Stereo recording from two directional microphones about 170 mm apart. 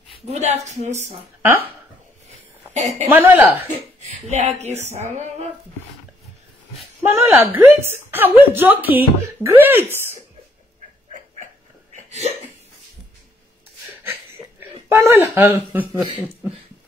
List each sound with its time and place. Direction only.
0.2 s a woman's voice: 40° right (ahead or behind)
1.4 s speech: 10° right (ahead or behind)
2.7 s a woman's voice: 40° right (ahead or behind)
3.1 s speech: 10° right (ahead or behind)
4.1 s a woman's voice: 40° right (ahead or behind)
7.1 s speech: 15° right (ahead or behind)
11.9 s a sound: 40° right (ahead or behind)
14.9 s speech: 15° right (ahead or behind)